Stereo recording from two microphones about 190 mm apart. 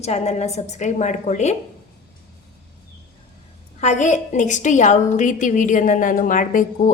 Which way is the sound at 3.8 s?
40° left (ahead or behind).